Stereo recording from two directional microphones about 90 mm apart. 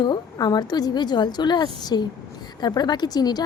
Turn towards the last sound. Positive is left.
turn(degrees=50)  # may be behind; listen again after turning